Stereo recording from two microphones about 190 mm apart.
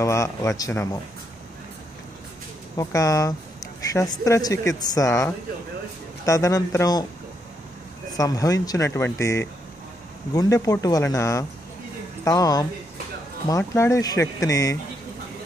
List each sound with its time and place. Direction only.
0.0 s speech: 15° left (ahead or behind)
2.7 s speech: 15° left (ahead or behind)
8.2 s speech: 20° left (ahead or behind)